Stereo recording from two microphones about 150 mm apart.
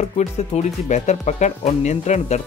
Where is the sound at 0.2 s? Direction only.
50° left (ahead or behind).